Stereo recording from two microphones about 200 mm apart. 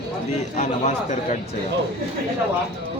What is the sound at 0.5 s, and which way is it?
Speech, 35° left (ahead or behind).